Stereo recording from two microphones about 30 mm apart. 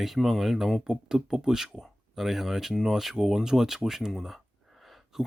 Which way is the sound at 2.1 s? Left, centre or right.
Centre.